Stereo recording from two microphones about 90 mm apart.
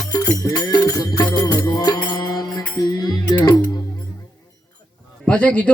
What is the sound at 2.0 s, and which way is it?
Mantra, 50° left (ahead or behind).